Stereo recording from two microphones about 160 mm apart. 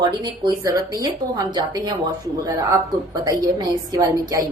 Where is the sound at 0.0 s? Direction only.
25° right (ahead or behind).